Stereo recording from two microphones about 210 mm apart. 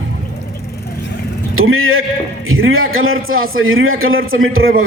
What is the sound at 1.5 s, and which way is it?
A man's voice, 75° right (ahead or behind).